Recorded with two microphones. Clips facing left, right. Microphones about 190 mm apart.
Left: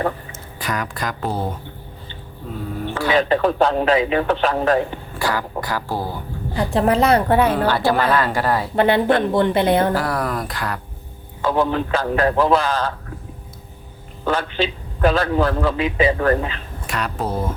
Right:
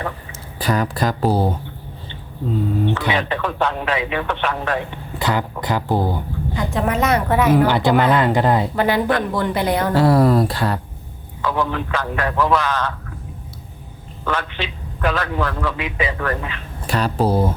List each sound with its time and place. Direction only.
0.6 s speech: 30° right (ahead or behind)
3.1 s a man's voice: 35° left (ahead or behind)
5.2 s speech: 20° right (ahead or behind)
6.6 s a man's voice: 35° left (ahead or behind)
7.5 s speech: 15° right (ahead or behind)
8.7 s a woman's voice: 25° left (ahead or behind)
9.9 s speech: 25° right (ahead or behind)
11.4 s a man's voice: 30° left (ahead or behind)
14.3 s a man's voice: 35° left (ahead or behind)
16.8 s speech: 30° right (ahead or behind)